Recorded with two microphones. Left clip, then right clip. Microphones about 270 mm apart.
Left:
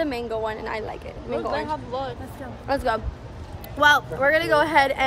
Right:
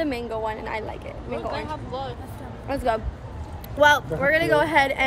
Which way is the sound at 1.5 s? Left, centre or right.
Left.